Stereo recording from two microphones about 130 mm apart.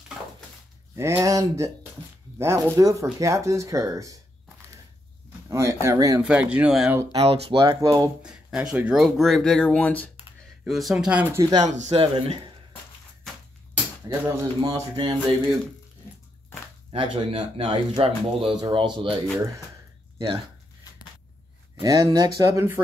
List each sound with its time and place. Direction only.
0.9 s speech: 20° right (ahead or behind)
5.5 s speech: 20° right (ahead or behind)
6.2 s speech: 10° right (ahead or behind)
7.2 s speech: 50° right (ahead or behind)
8.2 s speech: 5° right (ahead or behind); by 10.1 s 10° left (ahead or behind)
10.6 s speech: centre (ahead or behind)
11.3 s speech: 30° right (ahead or behind)
11.6 s speech: 65° right (ahead or behind)
12.1 s speech: 40° right (ahead or behind)
14.6 s speech: 35° right (ahead or behind)
16.9 s speech: 45° right (ahead or behind)
20.2 s speech: 50° right (ahead or behind)
21.8 s speech: 30° right (ahead or behind)